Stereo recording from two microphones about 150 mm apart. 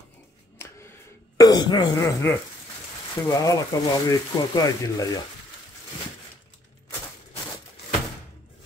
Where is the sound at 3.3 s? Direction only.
20° left (ahead or behind).